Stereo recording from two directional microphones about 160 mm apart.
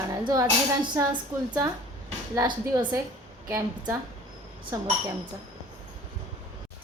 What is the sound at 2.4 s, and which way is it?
Speech, 30° right (ahead or behind).